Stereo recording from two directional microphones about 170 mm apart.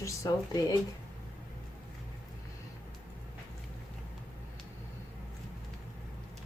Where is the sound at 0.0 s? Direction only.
20° left (ahead or behind).